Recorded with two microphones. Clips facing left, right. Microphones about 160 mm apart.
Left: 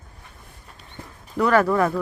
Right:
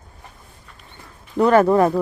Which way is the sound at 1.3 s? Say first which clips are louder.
Right 4 dB; 25° right (ahead or behind).